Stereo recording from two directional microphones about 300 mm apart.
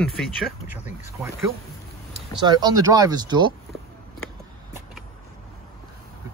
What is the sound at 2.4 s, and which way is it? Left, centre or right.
Speech, centre.